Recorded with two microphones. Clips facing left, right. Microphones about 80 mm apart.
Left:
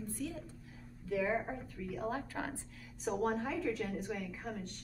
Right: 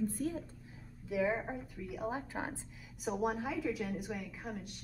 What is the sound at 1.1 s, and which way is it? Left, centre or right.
A woman's voice, centre.